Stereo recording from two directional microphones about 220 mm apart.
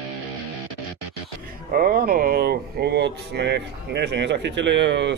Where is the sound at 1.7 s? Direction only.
40° right (ahead or behind).